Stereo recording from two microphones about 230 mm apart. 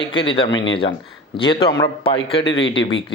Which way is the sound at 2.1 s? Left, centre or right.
Left.